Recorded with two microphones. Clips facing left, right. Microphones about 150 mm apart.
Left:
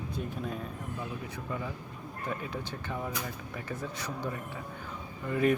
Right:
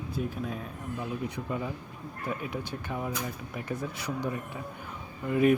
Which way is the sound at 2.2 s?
10° right (ahead or behind).